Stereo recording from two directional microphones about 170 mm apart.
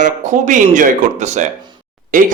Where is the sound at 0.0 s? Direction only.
45° right (ahead or behind).